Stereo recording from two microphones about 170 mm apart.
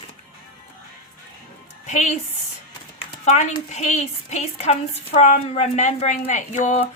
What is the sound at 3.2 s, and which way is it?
A woman's voice, 40° left (ahead or behind).